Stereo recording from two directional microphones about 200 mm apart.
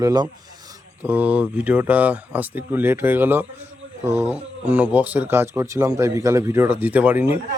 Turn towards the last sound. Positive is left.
turn(degrees=-10)  # may be behind; listen again after turning